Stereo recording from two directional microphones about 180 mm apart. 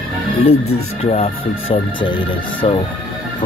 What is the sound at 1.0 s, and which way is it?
Speech, 30° left (ahead or behind).